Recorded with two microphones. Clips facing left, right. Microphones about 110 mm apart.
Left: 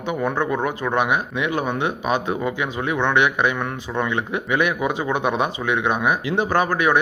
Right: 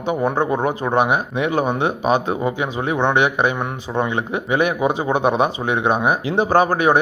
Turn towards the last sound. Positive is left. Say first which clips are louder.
# right 3 dB
turn(degrees=-35)  # may be behind; listen again after turning